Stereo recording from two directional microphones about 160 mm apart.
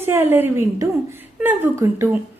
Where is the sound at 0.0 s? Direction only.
15° right (ahead or behind).